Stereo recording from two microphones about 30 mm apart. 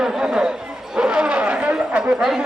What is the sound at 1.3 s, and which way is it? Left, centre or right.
Speech, right.